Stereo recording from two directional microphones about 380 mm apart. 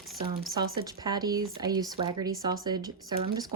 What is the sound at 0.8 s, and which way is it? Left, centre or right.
Speech, centre.